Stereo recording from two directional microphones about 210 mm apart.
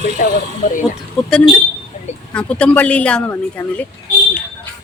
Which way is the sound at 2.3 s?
5° left (ahead or behind).